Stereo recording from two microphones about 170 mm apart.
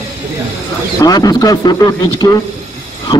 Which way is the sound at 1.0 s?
20° left (ahead or behind).